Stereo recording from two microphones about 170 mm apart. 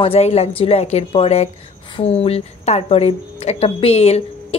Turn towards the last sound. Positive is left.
turn(degrees=35)  # may be behind; listen again after turning